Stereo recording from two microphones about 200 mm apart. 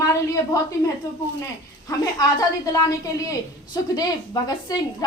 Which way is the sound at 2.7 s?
15° left (ahead or behind).